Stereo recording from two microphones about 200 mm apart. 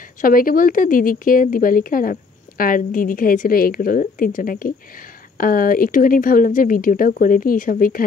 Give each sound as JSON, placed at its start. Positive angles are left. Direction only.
{"t": 0.2, "sound": "a woman's voice", "side_deg": 45}